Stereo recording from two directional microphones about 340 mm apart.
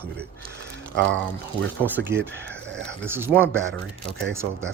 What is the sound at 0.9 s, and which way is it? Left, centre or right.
Speech, right.